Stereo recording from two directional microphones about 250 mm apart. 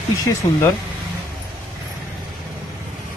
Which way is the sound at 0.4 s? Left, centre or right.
Centre.